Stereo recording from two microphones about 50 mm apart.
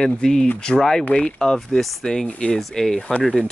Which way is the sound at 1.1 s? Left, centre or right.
Left.